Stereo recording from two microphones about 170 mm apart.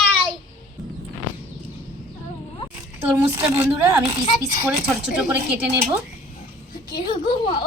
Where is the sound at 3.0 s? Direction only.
10° right (ahead or behind).